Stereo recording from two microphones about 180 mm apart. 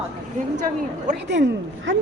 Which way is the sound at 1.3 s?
80° right.